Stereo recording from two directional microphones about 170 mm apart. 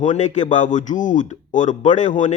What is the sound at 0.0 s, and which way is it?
A man's voice, 45° left (ahead or behind).